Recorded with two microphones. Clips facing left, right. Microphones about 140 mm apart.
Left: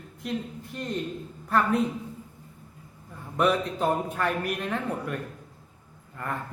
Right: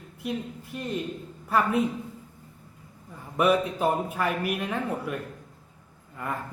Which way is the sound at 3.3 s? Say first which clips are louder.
Right 2 dB; 5° right (ahead or behind).